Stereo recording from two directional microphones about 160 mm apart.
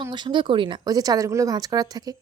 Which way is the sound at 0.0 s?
30° right (ahead or behind).